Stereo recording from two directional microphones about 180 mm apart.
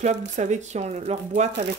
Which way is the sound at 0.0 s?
40° right (ahead or behind).